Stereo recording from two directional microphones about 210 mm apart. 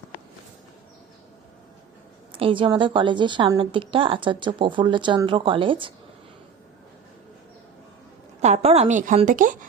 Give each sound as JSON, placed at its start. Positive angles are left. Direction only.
{"t": 2.3, "sound": "a woman's voice", "side_deg": -25}
{"t": 8.4, "sound": "a woman's voice", "side_deg": -35}